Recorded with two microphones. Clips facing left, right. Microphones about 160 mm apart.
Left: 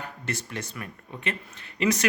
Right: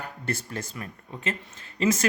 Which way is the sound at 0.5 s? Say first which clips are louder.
Right 1 dB; 30° right (ahead or behind).